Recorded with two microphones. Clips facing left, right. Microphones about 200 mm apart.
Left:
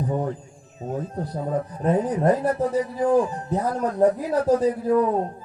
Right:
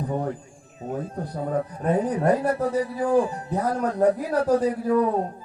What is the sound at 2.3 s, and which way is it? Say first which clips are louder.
Speech: left 1 dB; 30° right (ahead or behind).